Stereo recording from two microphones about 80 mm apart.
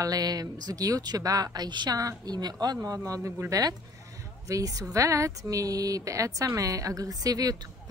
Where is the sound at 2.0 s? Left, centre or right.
Right.